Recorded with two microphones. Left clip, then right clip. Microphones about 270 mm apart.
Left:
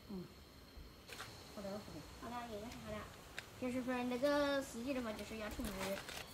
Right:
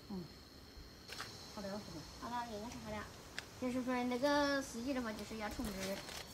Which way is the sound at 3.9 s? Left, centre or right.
Centre.